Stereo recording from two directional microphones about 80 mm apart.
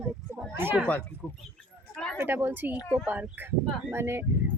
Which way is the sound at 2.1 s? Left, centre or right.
Right.